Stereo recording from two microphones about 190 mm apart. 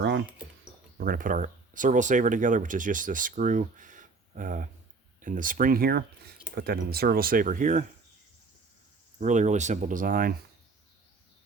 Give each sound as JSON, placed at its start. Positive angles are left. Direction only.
{"t": 0.9, "sound": "speech", "side_deg": -50}
{"t": 9.2, "sound": "speech", "side_deg": -40}